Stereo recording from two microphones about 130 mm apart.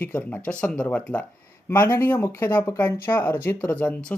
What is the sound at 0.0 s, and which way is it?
Speech, 10° left (ahead or behind).